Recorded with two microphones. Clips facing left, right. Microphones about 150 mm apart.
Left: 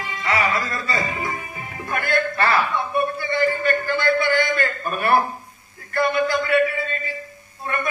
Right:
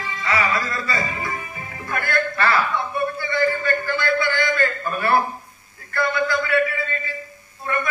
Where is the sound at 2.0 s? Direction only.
20° left (ahead or behind).